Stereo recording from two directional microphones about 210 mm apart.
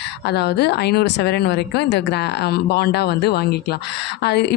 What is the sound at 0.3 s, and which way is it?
A woman's voice, 50° left (ahead or behind).